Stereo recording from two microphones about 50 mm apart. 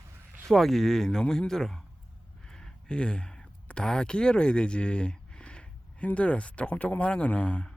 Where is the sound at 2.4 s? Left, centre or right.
Centre.